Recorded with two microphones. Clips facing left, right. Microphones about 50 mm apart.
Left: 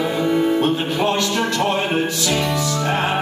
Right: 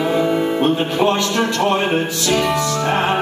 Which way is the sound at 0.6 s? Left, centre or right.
Centre.